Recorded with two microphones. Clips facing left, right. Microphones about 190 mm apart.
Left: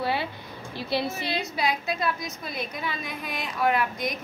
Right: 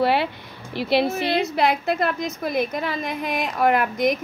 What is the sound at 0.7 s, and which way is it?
A woman's voice, 75° right (ahead or behind).